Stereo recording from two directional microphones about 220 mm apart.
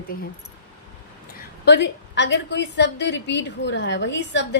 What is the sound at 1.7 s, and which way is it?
A woman's voice, 50° left (ahead or behind).